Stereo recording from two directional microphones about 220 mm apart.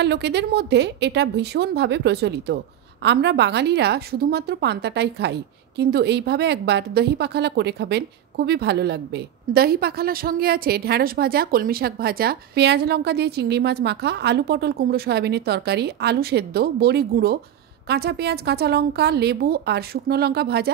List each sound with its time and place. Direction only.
0.0 s a woman's voice: 50° right (ahead or behind)